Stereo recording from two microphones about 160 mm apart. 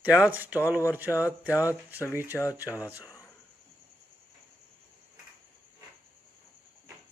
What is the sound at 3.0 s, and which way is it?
Cricket, 20° left (ahead or behind).